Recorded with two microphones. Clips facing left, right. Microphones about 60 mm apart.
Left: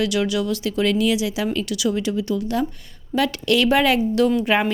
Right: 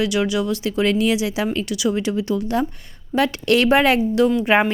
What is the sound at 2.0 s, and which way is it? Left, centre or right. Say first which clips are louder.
A woman's voice: right 1 dB; right.